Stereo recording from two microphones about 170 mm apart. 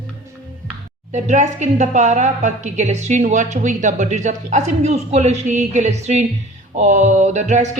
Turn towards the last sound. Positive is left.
turn(degrees=-45)  # may be behind; listen again after turning